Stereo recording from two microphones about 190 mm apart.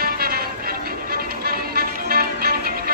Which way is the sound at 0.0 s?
55° right (ahead or behind).